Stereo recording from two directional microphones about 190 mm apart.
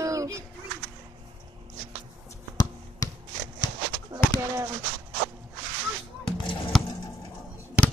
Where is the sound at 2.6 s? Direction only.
20° left (ahead or behind).